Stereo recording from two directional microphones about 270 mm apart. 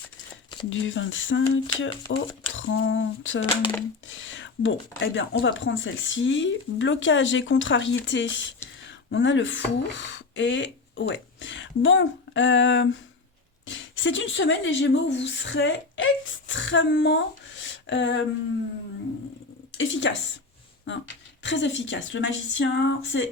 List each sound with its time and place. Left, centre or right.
0.7 s speech: left
19.7 s speech: left
21.4 s speech: left